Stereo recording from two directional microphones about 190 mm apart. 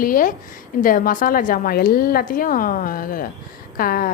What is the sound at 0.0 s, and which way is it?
Speech, 45° left (ahead or behind).